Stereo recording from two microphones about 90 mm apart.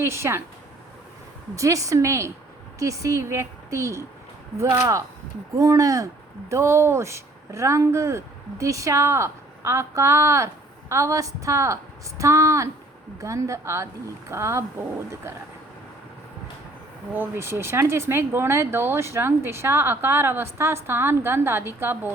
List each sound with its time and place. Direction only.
0.0 s speech: 30° right (ahead or behind)
1.5 s speech: 35° right (ahead or behind)
17.2 s speech: 30° right (ahead or behind)